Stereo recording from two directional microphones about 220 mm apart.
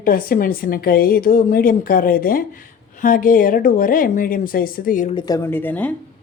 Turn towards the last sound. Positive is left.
turn(degrees=10)  # may be behind; listen again after turning